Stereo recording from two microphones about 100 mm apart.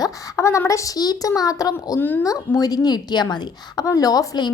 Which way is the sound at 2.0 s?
20° left (ahead or behind).